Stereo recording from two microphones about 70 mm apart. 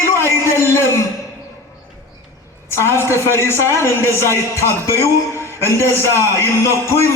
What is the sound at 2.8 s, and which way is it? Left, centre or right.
A man's voice, left.